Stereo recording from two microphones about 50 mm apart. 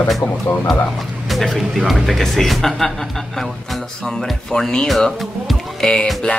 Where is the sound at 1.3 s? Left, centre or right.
Centre.